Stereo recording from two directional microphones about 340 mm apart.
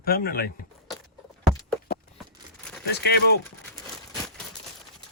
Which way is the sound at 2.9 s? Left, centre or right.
Left.